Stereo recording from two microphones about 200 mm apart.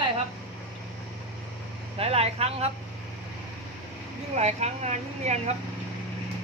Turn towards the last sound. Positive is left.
turn(degrees=-35)  # may be behind; listen again after turning